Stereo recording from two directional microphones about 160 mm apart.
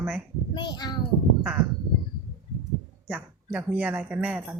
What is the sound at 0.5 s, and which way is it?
Speech, 25° left (ahead or behind).